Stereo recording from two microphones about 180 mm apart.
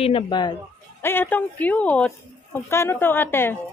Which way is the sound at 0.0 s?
25° left (ahead or behind).